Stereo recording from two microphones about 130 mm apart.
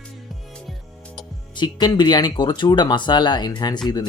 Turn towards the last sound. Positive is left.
turn(degrees=30)  # may be behind; listen again after turning